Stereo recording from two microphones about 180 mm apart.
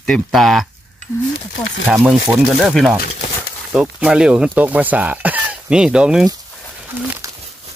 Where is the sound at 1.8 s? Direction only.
Centre (ahead or behind).